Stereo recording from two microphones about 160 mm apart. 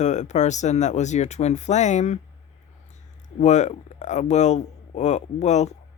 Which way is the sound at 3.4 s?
45° left (ahead or behind).